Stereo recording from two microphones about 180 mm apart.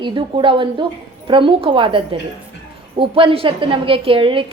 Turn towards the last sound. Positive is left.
turn(degrees=-30)  # may be behind; listen again after turning